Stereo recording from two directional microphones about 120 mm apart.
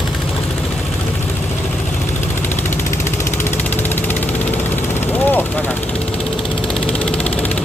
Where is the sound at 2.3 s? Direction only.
20° left (ahead or behind).